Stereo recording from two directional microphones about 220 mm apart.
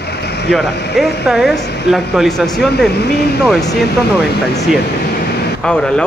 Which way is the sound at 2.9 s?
45° left (ahead or behind).